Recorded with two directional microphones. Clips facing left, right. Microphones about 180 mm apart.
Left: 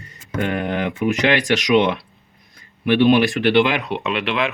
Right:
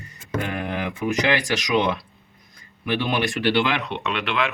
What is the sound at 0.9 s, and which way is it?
Speech, 20° left (ahead or behind).